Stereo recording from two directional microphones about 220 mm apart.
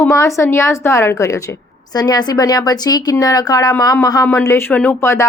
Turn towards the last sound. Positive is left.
turn(degrees=10)  # may be behind; listen again after turning